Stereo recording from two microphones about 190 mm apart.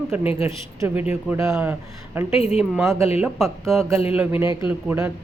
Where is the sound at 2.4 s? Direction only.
35° left (ahead or behind).